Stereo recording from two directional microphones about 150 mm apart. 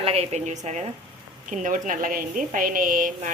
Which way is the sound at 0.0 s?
45° right (ahead or behind).